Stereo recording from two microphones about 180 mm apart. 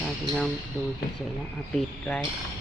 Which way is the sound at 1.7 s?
5° left (ahead or behind).